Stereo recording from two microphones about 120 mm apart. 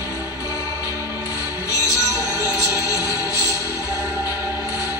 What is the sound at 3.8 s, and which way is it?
Music, 25° right (ahead or behind).